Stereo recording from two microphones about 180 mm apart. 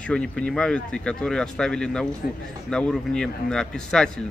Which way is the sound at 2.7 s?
5° left (ahead or behind).